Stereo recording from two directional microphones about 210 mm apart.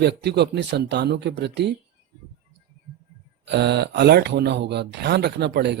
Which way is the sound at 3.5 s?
55° right (ahead or behind).